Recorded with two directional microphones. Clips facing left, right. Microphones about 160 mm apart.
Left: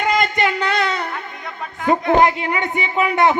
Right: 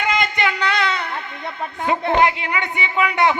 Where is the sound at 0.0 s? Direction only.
45° left (ahead or behind).